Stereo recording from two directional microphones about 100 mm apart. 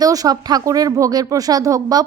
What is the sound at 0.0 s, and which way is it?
Speech, 40° right (ahead or behind).